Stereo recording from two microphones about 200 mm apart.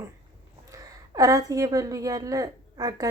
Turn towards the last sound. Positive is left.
turn(degrees=-20)  # may be behind; listen again after turning